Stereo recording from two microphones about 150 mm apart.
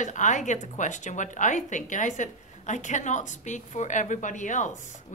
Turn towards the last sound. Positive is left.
turn(degrees=55)  # may be behind; listen again after turning